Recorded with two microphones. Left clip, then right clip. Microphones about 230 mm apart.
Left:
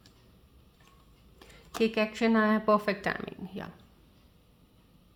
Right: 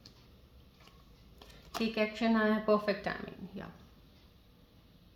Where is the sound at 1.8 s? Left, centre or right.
Left.